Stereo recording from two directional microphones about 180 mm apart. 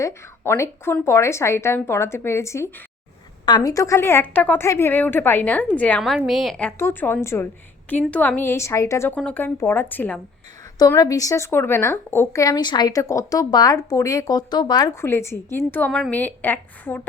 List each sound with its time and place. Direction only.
0.0 s a woman's voice: 15° left (ahead or behind)